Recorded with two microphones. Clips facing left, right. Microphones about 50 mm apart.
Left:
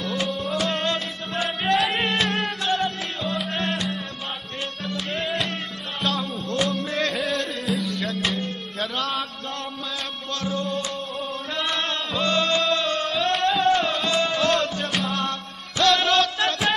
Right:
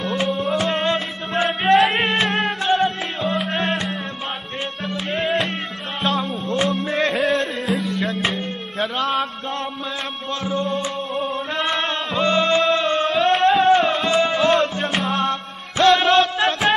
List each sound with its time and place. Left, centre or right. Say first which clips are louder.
0.2 s music: right 5 dB; right
3.7 s music: right 3 dB; right
10.4 s music: right 4 dB; right